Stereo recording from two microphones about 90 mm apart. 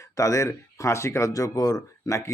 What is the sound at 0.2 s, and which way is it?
Speech, 35° left (ahead or behind).